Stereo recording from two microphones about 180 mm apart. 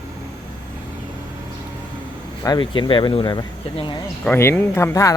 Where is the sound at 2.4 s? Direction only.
25° left (ahead or behind).